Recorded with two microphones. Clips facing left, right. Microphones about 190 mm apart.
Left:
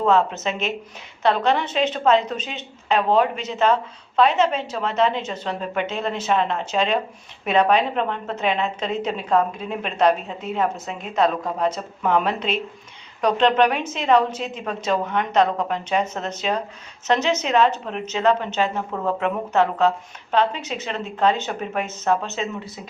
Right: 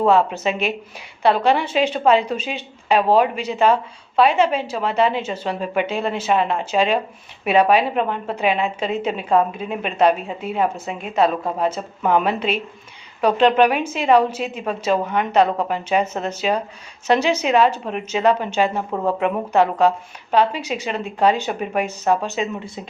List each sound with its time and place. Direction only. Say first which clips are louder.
0.0 s a woman's voice: right 3 dB; 10° right (ahead or behind)